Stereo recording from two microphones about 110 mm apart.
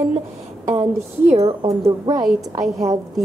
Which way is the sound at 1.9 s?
40° right (ahead or behind).